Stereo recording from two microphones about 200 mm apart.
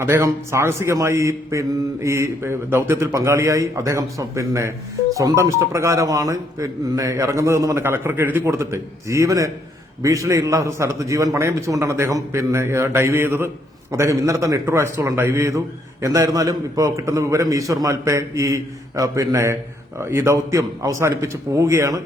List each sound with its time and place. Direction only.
0.0 s a man's voice: 15° right (ahead or behind)